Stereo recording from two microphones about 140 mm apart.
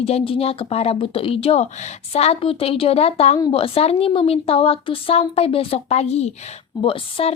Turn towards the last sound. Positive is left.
turn(degrees=40)  # may be behind; listen again after turning